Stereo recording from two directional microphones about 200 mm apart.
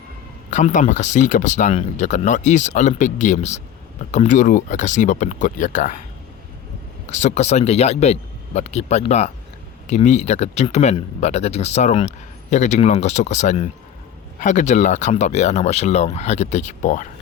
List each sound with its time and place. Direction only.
0.5 s speech: 40° left (ahead or behind)
7.1 s speech: 35° left (ahead or behind)